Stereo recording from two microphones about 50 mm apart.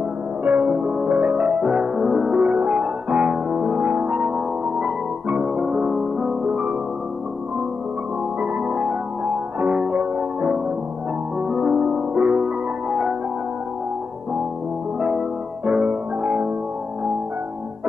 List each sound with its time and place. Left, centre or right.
0.4 s music: right
2.4 s music: right
8.4 s music: right
15.0 s music: centre